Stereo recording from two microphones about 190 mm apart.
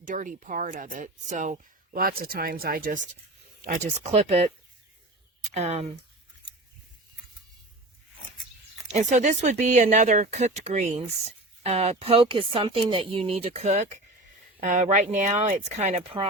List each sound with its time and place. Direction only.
0.0 s speech: 45° right (ahead or behind)
8.9 s speech: 35° right (ahead or behind)